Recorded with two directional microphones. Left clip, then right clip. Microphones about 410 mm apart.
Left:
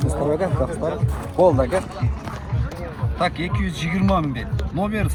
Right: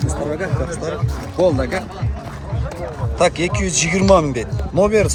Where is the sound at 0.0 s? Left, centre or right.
Centre.